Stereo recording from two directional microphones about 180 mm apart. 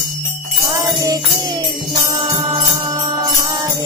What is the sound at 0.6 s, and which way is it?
Music, 20° right (ahead or behind).